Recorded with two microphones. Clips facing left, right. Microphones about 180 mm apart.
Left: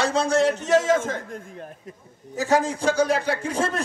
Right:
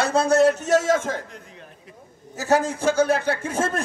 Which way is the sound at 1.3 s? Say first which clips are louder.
Left 7 dB; 50° left (ahead or behind).